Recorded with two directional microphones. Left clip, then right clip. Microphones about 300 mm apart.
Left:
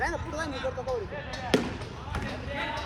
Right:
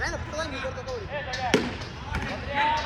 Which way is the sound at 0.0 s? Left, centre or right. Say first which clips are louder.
Even; left.